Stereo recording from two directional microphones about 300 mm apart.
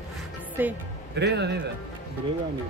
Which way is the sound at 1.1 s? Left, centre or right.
Right.